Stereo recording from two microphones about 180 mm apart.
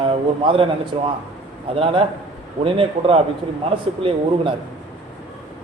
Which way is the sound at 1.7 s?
30° right (ahead or behind).